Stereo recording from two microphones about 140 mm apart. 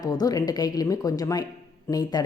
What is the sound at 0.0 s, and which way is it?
Speech, 30° left (ahead or behind).